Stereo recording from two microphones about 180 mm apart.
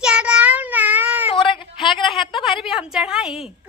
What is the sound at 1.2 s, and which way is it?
Speech, 30° left (ahead or behind).